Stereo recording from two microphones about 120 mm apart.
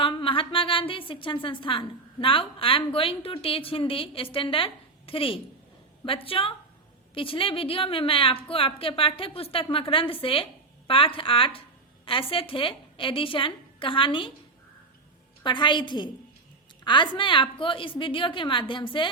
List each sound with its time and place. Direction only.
0.0 s a woman's voice: 45° left (ahead or behind)
15.4 s a woman's voice: 40° left (ahead or behind)